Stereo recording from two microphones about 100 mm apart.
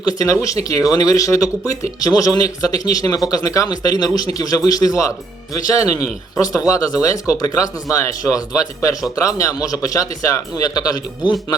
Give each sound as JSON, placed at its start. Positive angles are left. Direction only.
{"t": 0.0, "sound": "speech", "side_deg": 40}